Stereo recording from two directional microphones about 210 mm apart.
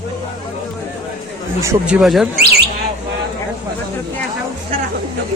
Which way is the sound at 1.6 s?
10° right (ahead or behind).